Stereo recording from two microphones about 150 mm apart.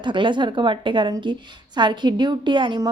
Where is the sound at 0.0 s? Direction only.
30° right (ahead or behind).